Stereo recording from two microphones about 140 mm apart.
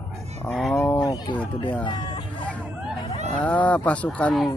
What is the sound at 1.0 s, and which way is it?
Speech, 30° left (ahead or behind).